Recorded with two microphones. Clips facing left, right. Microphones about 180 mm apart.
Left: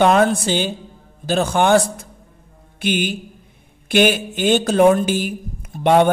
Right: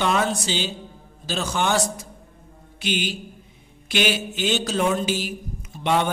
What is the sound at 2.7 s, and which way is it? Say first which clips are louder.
Mantra: left 6 dB; 55° left (ahead or behind).